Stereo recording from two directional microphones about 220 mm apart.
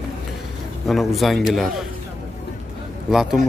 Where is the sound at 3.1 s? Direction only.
Centre (ahead or behind).